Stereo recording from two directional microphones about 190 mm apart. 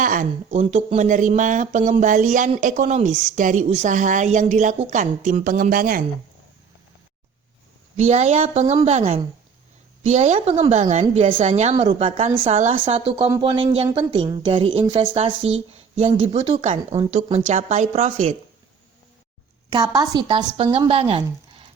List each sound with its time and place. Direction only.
0.0 s speech: 45° right (ahead or behind)
3.1 s a woman's voice: centre (ahead or behind)
3.3 s speech: 40° right (ahead or behind)
7.9 s speech: 35° right (ahead or behind)
17.5 s speech: 35° right (ahead or behind)
19.7 s speech: 20° right (ahead or behind)